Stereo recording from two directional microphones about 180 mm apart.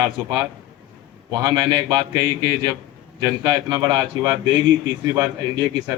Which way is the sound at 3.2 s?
20° right (ahead or behind).